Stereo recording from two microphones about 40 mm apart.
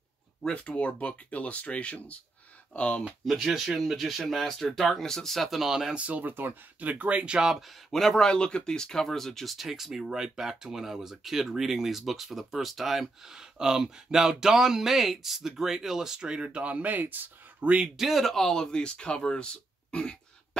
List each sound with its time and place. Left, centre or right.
0.5 s speech: left
3.3 s speech: centre
4.3 s speech: centre
5.6 s speech: centre
5.9 s speech: right
6.2 s speech: right
6.8 s speech: right
7.3 s speech: centre
7.9 s speech: centre
8.3 s speech: left
9.0 s speech: centre; by 16.4 s right
16.4 s speech: right
17.9 s speech: centre
18.2 s speech: centre